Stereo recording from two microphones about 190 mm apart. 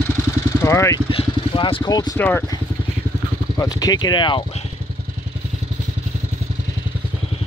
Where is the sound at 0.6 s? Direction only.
15° left (ahead or behind).